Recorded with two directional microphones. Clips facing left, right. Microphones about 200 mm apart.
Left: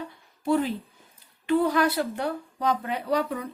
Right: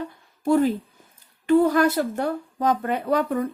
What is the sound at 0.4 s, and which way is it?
A woman's voice, 45° right (ahead or behind).